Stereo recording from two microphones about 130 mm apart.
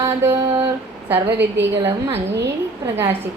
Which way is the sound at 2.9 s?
15° right (ahead or behind).